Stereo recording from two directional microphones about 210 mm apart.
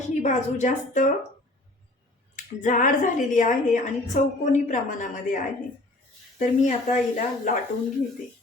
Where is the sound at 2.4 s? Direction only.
40° left (ahead or behind).